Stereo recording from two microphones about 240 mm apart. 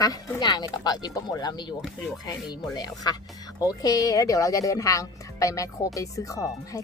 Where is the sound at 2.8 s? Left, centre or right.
Centre.